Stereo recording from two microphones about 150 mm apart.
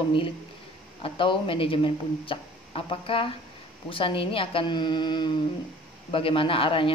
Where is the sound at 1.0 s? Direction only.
35° left (ahead or behind).